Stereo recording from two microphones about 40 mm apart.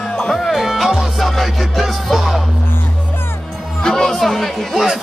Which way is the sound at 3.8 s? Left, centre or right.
Centre.